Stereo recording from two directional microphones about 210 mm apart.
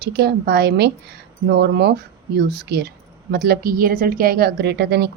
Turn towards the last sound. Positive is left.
turn(degrees=-50)  # may be behind; listen again after turning